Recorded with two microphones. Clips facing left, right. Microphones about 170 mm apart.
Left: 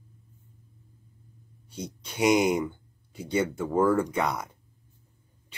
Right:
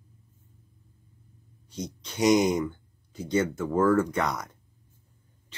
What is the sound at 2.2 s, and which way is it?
Speech, 10° left (ahead or behind).